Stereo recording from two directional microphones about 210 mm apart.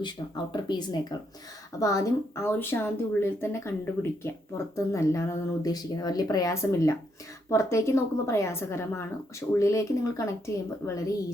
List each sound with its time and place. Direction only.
0.5 s speech: 20° left (ahead or behind)